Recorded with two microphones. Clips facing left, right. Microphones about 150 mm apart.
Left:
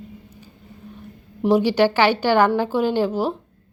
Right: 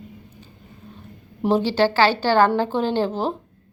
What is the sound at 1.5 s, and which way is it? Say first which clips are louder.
A woman's voice: left 2 dB; 15° left (ahead or behind).